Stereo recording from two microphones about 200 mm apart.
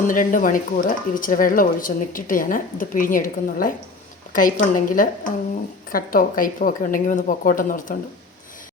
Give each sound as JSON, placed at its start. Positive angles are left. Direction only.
{"t": 0.1, "sound": "a woman's voice", "side_deg": 40}